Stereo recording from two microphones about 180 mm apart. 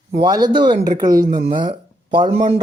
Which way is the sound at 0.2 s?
25° right (ahead or behind).